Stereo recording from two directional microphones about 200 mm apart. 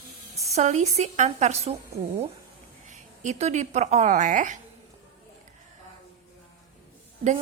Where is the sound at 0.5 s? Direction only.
35° right (ahead or behind).